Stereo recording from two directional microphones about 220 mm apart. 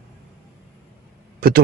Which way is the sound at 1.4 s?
45° right (ahead or behind).